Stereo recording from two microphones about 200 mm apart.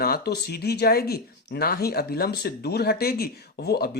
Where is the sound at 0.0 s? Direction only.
50° left (ahead or behind).